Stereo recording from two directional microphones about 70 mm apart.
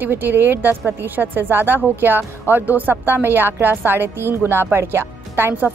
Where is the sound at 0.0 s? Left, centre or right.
Right.